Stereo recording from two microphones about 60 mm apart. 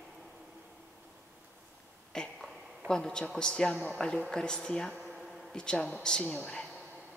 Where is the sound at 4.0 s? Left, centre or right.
Centre.